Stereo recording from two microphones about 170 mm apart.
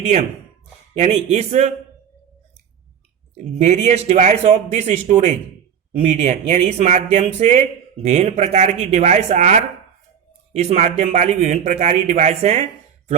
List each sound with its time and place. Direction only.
0.9 s speech: 40° right (ahead or behind)
3.3 s speech: 45° right (ahead or behind)